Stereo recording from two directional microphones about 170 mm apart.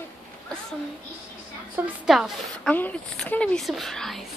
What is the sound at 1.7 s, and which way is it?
Speech, 5° right (ahead or behind).